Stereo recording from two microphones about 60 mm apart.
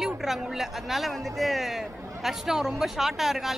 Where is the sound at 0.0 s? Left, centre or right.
Centre.